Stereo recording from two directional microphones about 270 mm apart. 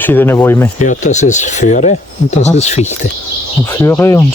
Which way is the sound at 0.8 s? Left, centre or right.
Left.